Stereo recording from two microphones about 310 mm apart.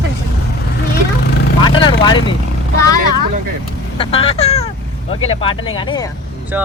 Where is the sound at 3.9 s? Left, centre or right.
Centre.